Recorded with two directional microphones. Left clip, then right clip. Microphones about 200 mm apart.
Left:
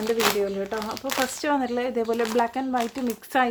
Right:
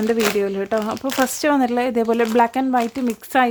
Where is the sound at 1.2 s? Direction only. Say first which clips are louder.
Right 7 dB; 45° right (ahead or behind).